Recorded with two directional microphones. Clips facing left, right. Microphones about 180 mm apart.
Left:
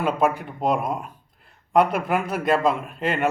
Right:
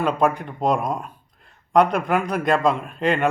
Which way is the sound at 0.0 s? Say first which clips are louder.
Right 1 dB; 5° left (ahead or behind).